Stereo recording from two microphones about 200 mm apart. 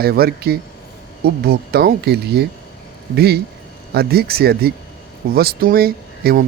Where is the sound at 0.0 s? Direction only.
50° right (ahead or behind).